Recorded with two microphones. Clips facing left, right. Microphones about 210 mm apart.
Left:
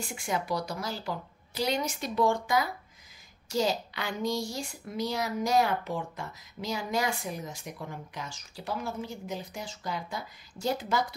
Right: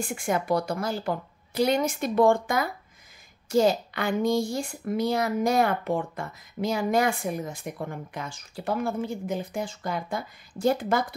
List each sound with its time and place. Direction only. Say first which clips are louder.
0.0 s a woman's voice: right 5 dB; 50° right (ahead or behind)